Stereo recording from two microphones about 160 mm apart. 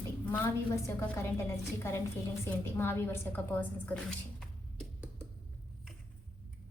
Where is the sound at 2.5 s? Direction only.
15° left (ahead or behind).